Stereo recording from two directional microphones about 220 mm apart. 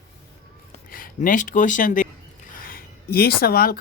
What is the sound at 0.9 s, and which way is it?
Speech, 40° left (ahead or behind).